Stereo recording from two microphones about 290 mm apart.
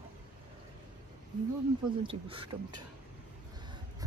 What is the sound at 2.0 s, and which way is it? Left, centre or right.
Speech, centre.